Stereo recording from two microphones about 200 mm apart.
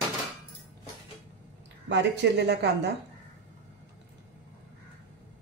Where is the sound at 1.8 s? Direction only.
60° right (ahead or behind).